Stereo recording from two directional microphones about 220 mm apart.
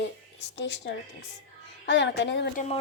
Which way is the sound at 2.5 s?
30° left (ahead or behind).